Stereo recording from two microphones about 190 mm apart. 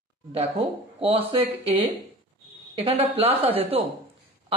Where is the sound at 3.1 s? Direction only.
30° right (ahead or behind).